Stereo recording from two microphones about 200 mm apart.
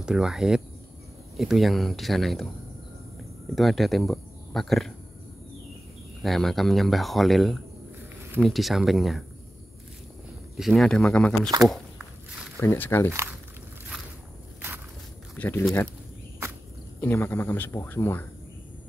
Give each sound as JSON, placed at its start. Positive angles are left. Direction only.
{"t": 0.0, "sound": "speech", "side_deg": -5}
{"t": 3.5, "sound": "speech", "side_deg": 0}
{"t": 6.2, "sound": "speech", "side_deg": 0}
{"t": 10.6, "sound": "speech", "side_deg": 0}
{"t": 12.5, "sound": "speech", "side_deg": 10}
{"t": 15.3, "sound": "speech", "side_deg": 10}
{"t": 17.0, "sound": "speech", "side_deg": 10}